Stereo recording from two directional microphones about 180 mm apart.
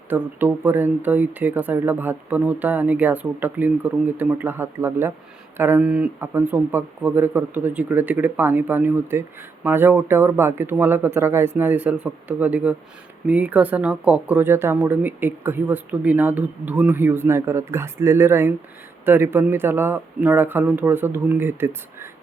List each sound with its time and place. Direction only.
0.1 s speech: 10° right (ahead or behind)